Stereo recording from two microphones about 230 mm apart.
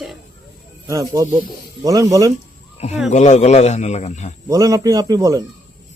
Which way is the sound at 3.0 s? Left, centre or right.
Left.